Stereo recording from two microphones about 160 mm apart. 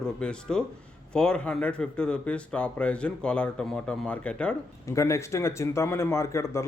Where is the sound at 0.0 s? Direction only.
5° left (ahead or behind).